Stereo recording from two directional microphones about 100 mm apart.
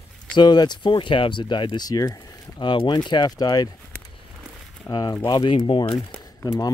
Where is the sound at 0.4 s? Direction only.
45° left (ahead or behind).